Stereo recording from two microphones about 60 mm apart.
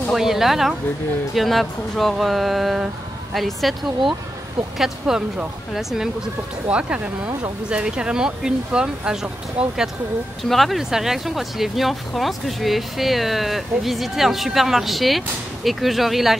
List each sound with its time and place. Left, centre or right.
0.1 s speech: centre
6.7 s speech: centre
10.4 s speech: centre